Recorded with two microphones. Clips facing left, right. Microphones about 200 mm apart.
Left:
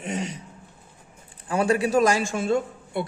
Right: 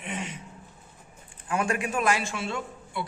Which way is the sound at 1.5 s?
35° left (ahead or behind).